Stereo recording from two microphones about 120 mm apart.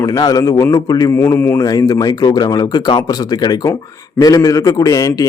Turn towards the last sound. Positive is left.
turn(degrees=30)  # may be behind; listen again after turning